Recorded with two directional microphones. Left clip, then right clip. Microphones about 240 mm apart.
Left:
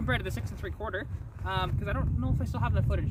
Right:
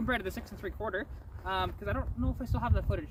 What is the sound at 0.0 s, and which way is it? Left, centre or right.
Speech, centre.